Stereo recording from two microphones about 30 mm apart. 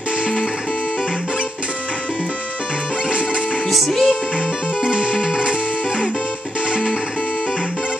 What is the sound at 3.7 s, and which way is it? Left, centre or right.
Music, centre.